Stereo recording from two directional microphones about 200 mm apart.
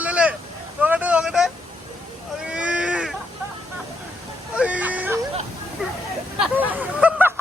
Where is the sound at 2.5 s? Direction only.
5° right (ahead or behind).